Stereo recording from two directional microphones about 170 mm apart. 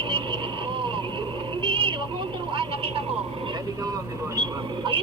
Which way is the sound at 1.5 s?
30° right (ahead or behind).